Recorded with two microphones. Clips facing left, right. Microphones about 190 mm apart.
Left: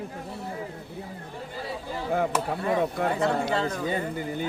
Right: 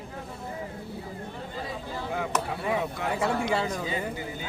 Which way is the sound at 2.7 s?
50° left (ahead or behind).